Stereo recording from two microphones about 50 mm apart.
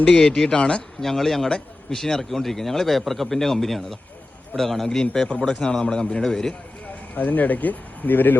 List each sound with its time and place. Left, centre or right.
0.0 s a man's voice: centre
0.9 s a man's voice: centre
1.5 s a man's voice: centre
2.0 s a man's voice: centre
7.2 s speech: left